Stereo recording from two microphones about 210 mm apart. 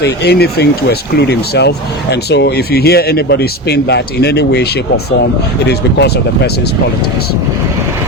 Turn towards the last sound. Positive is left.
turn(degrees=50)  # may be behind; listen again after turning